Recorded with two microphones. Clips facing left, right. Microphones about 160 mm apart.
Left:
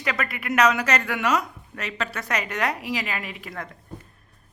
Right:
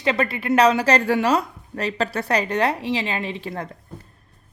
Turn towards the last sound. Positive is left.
turn(degrees=-30)  # may be behind; listen again after turning